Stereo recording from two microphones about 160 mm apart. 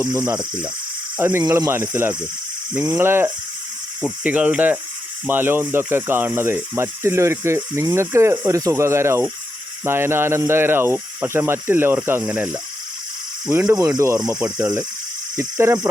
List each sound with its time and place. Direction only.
1.2 s speech: 15° right (ahead or behind)
13.5 s speech: 20° right (ahead or behind)
15.4 s speech: 15° right (ahead or behind)